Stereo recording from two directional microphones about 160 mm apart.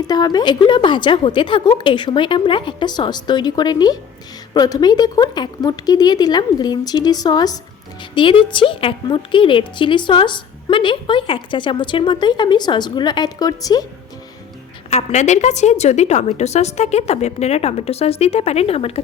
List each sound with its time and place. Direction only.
0.1 s a woman's voice: 25° left (ahead or behind)
14.8 s a woman's voice: 45° left (ahead or behind)